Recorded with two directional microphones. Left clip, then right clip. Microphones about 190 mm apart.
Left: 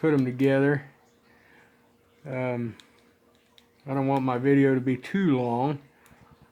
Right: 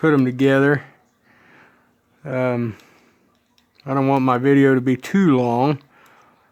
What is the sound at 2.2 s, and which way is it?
Speech, 40° right (ahead or behind).